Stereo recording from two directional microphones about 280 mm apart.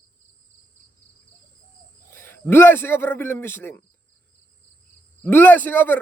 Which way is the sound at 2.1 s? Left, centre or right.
Centre.